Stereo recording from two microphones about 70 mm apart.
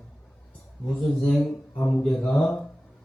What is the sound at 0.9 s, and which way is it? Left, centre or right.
Speech, centre.